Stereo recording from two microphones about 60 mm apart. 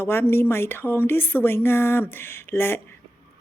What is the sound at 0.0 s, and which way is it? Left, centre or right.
A woman's voice, left.